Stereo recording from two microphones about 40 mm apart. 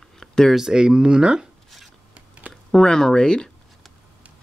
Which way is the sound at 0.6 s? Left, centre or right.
Centre.